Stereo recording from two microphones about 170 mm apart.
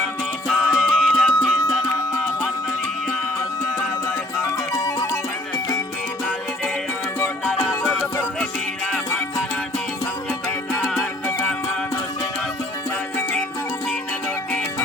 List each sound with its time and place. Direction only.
0.4 s music: centre (ahead or behind)
4.7 s music: 20° left (ahead or behind)